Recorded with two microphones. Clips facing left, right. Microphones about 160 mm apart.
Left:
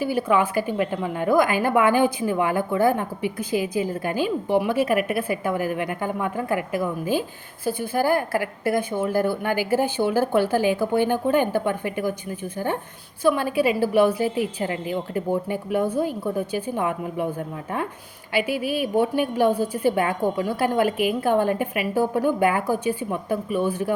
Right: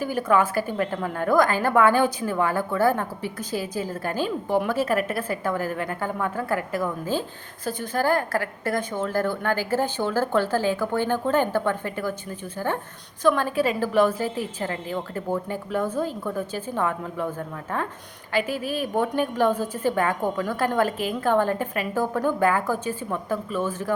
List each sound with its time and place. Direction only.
0.2 s a woman's voice: 10° left (ahead or behind)
18.3 s a woman's voice: 10° left (ahead or behind)